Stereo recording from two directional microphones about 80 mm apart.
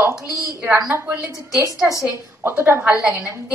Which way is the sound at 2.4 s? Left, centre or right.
Right.